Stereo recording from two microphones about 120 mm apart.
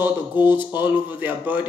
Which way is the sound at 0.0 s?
15° right (ahead or behind).